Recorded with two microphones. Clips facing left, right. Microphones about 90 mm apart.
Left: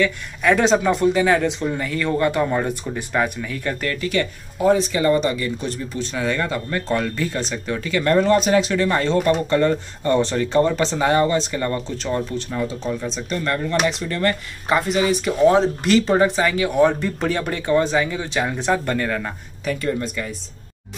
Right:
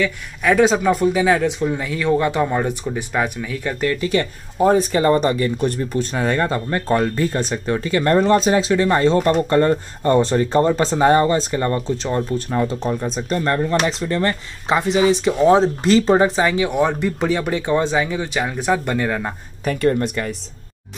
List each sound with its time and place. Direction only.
0.0 s speech: 5° right (ahead or behind)
4.1 s speech: 35° right (ahead or behind)
13.4 s speech: 30° right (ahead or behind); by 17.6 s 10° right (ahead or behind)
17.6 s speech: 20° right (ahead or behind)
19.6 s speech: 50° right (ahead or behind)